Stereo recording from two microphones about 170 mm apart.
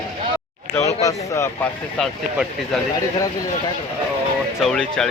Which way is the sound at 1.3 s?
15° left (ahead or behind).